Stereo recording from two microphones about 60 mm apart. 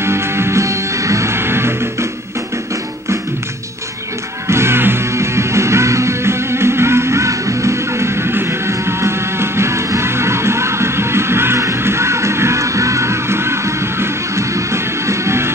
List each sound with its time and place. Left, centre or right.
0.0 s music: right
4.5 s music: right